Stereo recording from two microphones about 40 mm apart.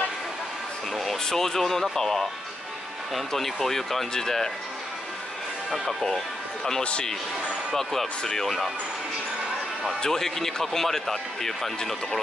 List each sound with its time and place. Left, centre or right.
0.9 s speech: centre
5.7 s speech: centre
6.8 s speech: left
7.7 s speech: centre
10.0 s speech: centre